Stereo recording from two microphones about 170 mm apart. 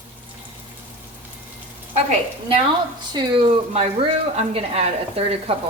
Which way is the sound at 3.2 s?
25° right (ahead or behind).